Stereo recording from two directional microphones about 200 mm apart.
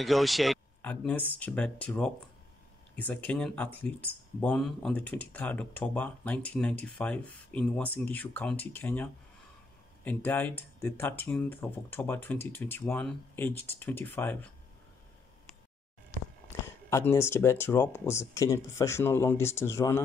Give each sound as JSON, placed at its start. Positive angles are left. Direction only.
{"t": 0.0, "sound": "speech", "side_deg": 0}
{"t": 16.6, "sound": "speech", "side_deg": 10}